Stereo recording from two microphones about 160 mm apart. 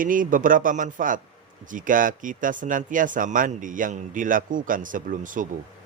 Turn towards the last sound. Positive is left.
turn(degrees=-55)  # may be behind; listen again after turning